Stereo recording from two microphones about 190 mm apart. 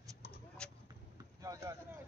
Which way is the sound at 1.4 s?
20° right (ahead or behind).